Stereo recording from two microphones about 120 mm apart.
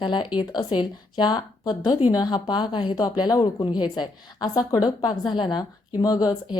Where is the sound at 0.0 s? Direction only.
40° left (ahead or behind).